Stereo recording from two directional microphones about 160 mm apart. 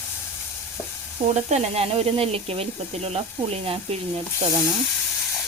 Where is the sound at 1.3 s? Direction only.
45° right (ahead or behind).